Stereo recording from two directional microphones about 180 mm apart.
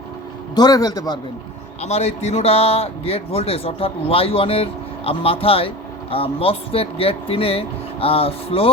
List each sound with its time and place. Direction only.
0.5 s a man's voice: 20° left (ahead or behind)
1.8 s a man's voice: 35° left (ahead or behind)